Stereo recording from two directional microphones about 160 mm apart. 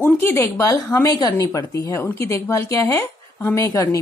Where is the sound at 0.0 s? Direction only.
15° left (ahead or behind).